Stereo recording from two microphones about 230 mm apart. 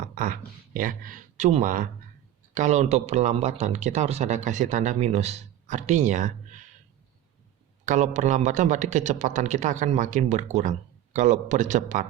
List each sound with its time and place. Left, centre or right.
0.1 s a man's voice: right
7.9 s a man's voice: right